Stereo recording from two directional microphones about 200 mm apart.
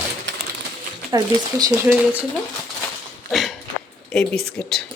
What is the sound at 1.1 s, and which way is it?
Speech, 20° right (ahead or behind).